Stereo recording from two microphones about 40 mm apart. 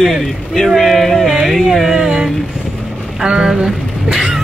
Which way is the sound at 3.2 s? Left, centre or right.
Right.